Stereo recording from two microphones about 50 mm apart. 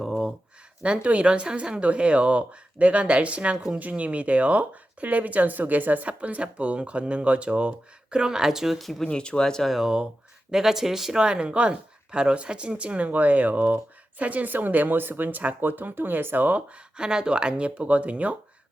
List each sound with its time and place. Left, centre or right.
0.8 s speech: right; by 9.0 s centre
9.0 s speech: centre
9.6 s speech: centre
11.2 s speech: centre; by 16.6 s right
17.0 s speech: centre